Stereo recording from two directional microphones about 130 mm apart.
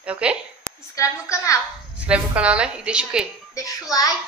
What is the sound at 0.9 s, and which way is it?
Speech, 25° left (ahead or behind).